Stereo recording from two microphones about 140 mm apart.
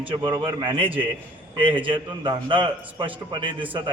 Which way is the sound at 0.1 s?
30° right (ahead or behind).